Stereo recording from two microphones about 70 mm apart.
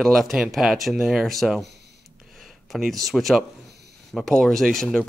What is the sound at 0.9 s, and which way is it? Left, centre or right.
Speech, centre.